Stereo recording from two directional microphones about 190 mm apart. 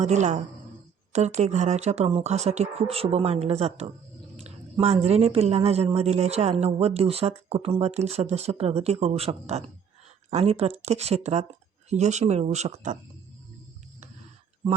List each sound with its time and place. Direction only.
0.0 s a woman's voice: 40° right (ahead or behind)